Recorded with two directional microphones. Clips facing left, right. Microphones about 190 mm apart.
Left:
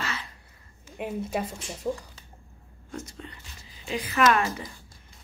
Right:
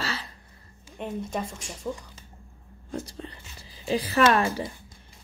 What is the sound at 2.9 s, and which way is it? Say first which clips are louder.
Speech: right 4 dB; 35° right (ahead or behind).